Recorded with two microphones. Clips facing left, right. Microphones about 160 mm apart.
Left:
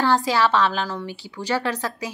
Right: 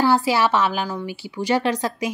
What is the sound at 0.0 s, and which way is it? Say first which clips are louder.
A woman's voice: right 2 dB; 10° right (ahead or behind).